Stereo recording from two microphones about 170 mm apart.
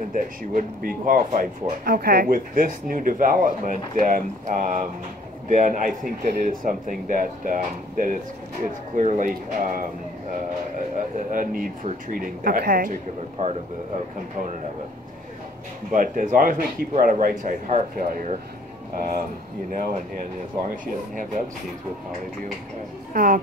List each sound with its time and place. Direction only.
0.1 s speech: 55° right (ahead or behind)
11.2 s speech: 55° right (ahead or behind)
13.4 s speech: 50° right (ahead or behind)
15.9 s speech: 50° right (ahead or behind)
23.1 s a woman's voice: 55° right (ahead or behind)